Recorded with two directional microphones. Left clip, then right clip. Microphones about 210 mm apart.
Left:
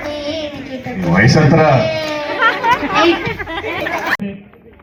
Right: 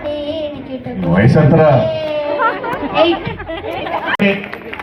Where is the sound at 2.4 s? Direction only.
Centre (ahead or behind).